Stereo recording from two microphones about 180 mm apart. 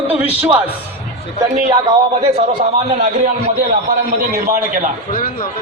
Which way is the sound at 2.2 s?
35° right (ahead or behind).